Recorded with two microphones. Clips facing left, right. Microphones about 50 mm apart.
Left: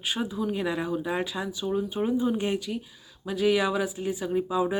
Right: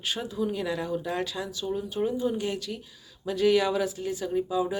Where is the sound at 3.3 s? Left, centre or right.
Centre.